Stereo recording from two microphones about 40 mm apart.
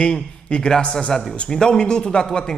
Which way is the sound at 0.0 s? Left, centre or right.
Left.